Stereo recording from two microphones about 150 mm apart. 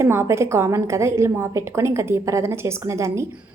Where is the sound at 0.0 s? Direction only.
15° right (ahead or behind).